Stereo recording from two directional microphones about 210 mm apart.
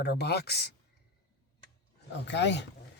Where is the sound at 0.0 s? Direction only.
50° left (ahead or behind).